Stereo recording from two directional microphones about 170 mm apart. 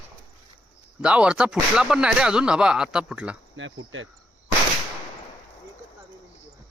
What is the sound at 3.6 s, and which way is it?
Cricket, 90° right.